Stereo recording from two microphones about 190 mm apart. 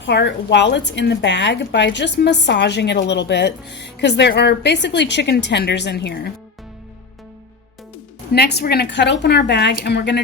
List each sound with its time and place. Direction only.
0.0 s a woman's voice: 65° left (ahead or behind)
8.3 s a woman's voice: 60° left (ahead or behind)